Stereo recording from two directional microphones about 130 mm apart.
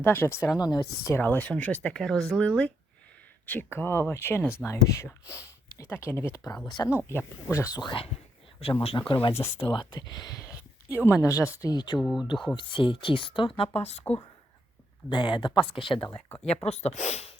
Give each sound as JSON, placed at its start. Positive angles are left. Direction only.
{"t": 0.0, "sound": "speech", "side_deg": 20}
{"t": 7.9, "sound": "speech", "side_deg": 45}
{"t": 9.4, "sound": "speech", "side_deg": 20}
{"t": 9.7, "sound": "speech", "side_deg": 30}
{"t": 11.9, "sound": "speech", "side_deg": 0}
{"t": 12.5, "sound": "speech", "side_deg": 40}
{"t": 15.1, "sound": "speech", "side_deg": 40}
{"t": 16.6, "sound": "speech", "side_deg": 55}